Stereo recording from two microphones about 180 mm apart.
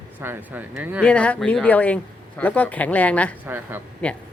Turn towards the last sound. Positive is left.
turn(degrees=10)  # may be behind; listen again after turning